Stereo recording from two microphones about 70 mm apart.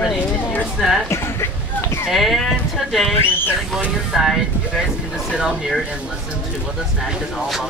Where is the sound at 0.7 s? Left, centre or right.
Centre.